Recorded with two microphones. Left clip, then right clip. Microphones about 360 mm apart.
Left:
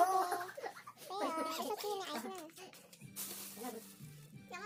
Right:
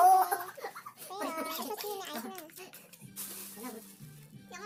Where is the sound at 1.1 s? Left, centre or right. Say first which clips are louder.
Right 1 dB; left.